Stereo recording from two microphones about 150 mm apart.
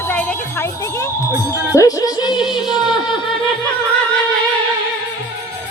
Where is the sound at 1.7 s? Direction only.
25° left (ahead or behind).